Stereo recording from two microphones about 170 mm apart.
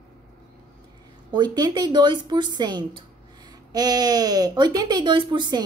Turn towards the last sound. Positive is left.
turn(degrees=-25)  # may be behind; listen again after turning